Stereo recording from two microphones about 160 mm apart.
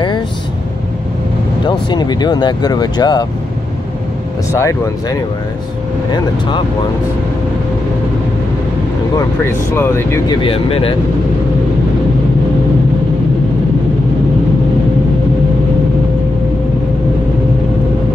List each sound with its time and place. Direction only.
1.7 s speech: 30° left (ahead or behind)
4.5 s speech: 20° left (ahead or behind)
9.1 s speech: 15° left (ahead or behind)
10.2 s speech: 35° left (ahead or behind)